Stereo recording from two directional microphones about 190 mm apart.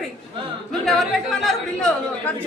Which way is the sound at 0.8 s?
Centre (ahead or behind).